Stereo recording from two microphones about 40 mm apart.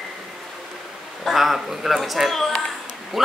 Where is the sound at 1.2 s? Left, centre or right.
Centre.